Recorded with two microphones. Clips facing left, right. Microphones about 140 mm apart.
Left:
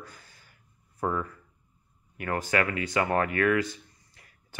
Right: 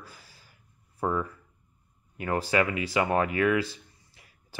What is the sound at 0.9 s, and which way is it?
Speech, 10° right (ahead or behind).